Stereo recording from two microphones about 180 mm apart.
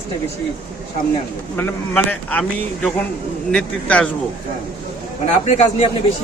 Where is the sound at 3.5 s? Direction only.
5° left (ahead or behind).